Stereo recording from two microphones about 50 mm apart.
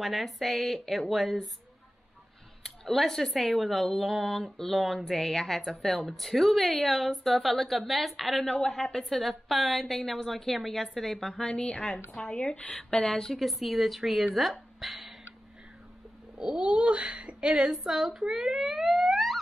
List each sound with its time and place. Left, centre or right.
0.0 s speech: centre
2.6 s speech: centre
11.4 s speech: left
13.4 s speech: centre
16.3 s speech: right
17.6 s speech: centre